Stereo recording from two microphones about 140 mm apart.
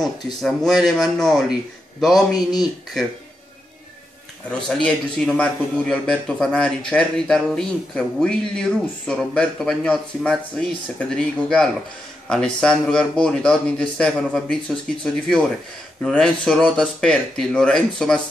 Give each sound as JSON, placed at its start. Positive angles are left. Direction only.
{"t": 0.0, "sound": "a man's voice", "side_deg": 0}
{"t": 2.3, "sound": "speech", "side_deg": 30}
{"t": 4.6, "sound": "a man's voice", "side_deg": 5}
{"t": 16.0, "sound": "a man's voice", "side_deg": 5}